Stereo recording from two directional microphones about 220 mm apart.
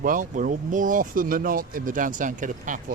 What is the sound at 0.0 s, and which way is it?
Speech, 35° right (ahead or behind).